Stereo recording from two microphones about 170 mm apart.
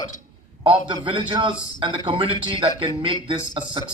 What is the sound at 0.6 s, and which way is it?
A man's voice, 30° right (ahead or behind).